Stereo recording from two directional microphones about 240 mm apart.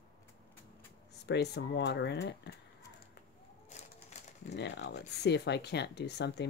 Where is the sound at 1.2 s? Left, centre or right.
Left.